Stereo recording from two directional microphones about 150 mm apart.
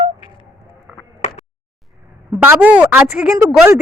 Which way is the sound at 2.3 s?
10° right (ahead or behind).